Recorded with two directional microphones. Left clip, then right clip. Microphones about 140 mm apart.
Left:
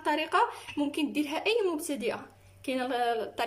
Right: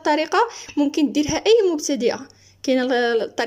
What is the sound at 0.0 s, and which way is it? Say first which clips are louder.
Speech: right 8 dB; 55° right (ahead or behind).